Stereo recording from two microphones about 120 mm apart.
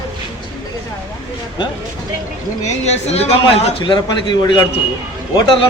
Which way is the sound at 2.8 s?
65° left (ahead or behind).